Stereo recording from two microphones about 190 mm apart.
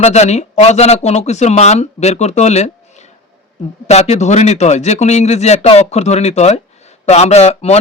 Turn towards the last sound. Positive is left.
turn(degrees=35)  # may be behind; listen again after turning